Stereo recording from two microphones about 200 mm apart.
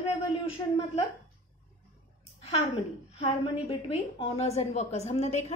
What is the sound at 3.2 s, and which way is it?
A woman's voice, 30° left (ahead or behind).